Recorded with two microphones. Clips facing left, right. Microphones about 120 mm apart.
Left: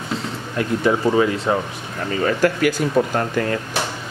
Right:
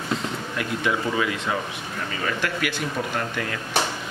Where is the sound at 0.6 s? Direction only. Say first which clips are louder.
Left 7 dB; 35° left (ahead or behind).